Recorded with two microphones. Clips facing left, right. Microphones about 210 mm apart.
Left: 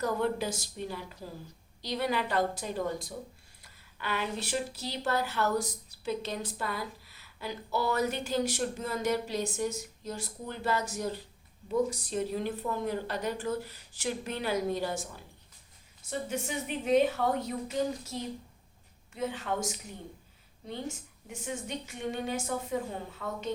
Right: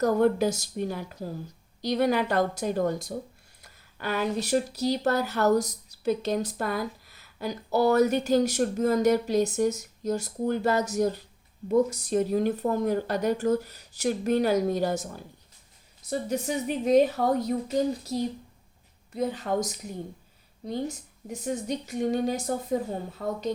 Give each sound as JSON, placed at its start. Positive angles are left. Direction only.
{"t": 0.0, "sound": "speech", "side_deg": -45}